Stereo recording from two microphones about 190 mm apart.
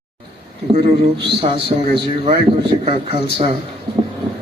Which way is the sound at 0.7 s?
30° right (ahead or behind).